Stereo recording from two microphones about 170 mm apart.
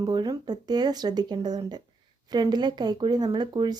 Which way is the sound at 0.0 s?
25° right (ahead or behind).